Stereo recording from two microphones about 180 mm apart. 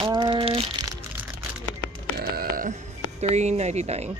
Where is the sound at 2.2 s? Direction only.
60° right (ahead or behind).